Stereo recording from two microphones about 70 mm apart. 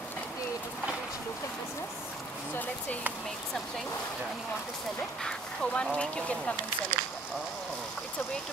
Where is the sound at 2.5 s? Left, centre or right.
Left.